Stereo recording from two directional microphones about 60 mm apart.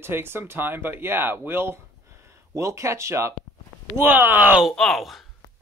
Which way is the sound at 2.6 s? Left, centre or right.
Right.